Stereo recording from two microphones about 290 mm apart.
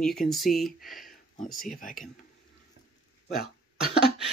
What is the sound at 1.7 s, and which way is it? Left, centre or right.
Speech, left.